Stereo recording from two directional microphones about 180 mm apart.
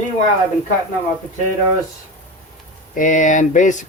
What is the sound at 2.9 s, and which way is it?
Speech, 45° left (ahead or behind).